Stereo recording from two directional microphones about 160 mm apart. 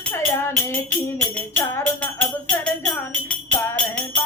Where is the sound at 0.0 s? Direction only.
15° left (ahead or behind).